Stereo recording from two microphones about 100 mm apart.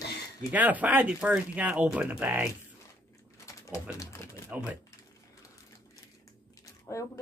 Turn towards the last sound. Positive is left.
turn(degrees=30)  # may be behind; listen again after turning